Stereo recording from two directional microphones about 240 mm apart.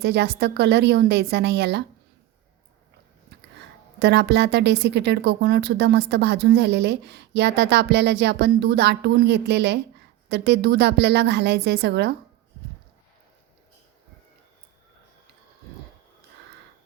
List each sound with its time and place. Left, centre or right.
0.0 s speech: right
4.0 s speech: right